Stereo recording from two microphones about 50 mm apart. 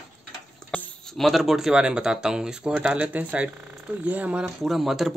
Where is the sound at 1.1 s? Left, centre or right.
Centre.